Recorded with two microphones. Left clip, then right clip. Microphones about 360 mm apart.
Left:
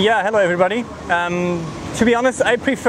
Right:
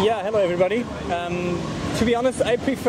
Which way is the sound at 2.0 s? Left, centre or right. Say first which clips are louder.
Left 6 dB; left.